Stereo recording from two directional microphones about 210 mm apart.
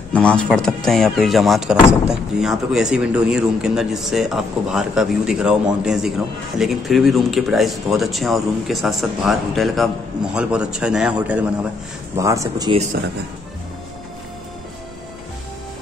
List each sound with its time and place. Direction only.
0.1 s speech: 5° left (ahead or behind); by 12.7 s 15° right (ahead or behind)